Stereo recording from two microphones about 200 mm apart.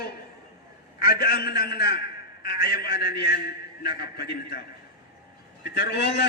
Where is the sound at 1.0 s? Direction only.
50° left (ahead or behind).